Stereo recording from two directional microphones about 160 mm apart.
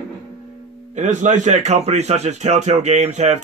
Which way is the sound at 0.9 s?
50° right (ahead or behind).